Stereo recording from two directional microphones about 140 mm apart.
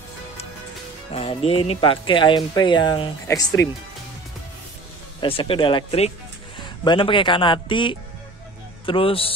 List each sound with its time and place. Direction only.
1.1 s speech: 45° left (ahead or behind); by 3.6 s 25° left (ahead or behind)
5.2 s speech: 40° left (ahead or behind)
6.6 s speech: 35° left (ahead or behind)